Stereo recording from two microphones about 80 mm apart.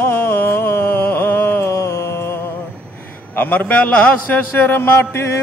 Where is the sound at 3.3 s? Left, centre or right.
Left.